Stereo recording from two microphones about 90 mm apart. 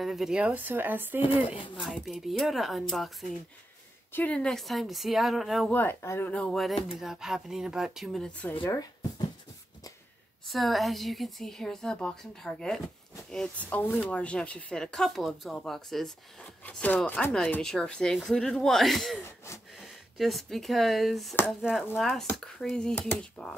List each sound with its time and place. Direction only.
0.0 s a woman's voice: 5° right (ahead or behind)
0.4 s speech: 15° right (ahead or behind)
1.8 s a woman's voice: centre (ahead or behind)
4.1 s a woman's voice: 15° left (ahead or behind); by 5.7 s centre (ahead or behind)
5.7 s speech: 20° left (ahead or behind)
6.3 s speech: 10° left (ahead or behind)
6.6 s a woman's voice: 5° right (ahead or behind)
10.5 s a woman's voice: centre (ahead or behind)
16.6 s a woman's voice: 15° left (ahead or behind)
19.2 s wheeze: 30° left (ahead or behind)
19.8 s a woman's voice: centre (ahead or behind)